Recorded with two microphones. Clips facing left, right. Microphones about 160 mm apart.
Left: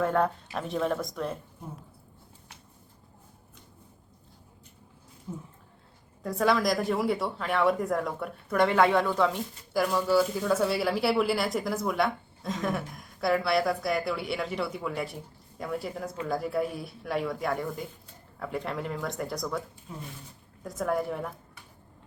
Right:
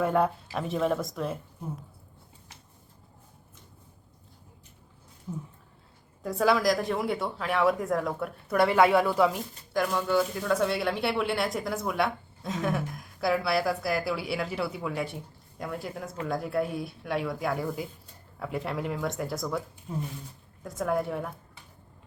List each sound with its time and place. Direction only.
0.0 s speech: 10° right (ahead or behind)
6.2 s speech: centre (ahead or behind)
9.7 s speech: 5° left (ahead or behind)
20.7 s speech: centre (ahead or behind)